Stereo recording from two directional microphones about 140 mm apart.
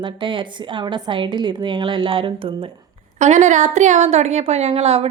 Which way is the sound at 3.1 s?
55° right (ahead or behind).